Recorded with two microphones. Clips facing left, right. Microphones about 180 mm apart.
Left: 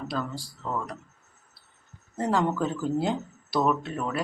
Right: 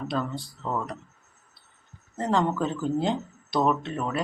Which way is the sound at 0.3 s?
20° right (ahead or behind).